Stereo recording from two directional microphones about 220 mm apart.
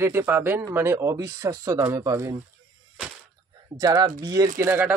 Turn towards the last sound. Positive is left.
turn(degrees=-10)  # may be behind; listen again after turning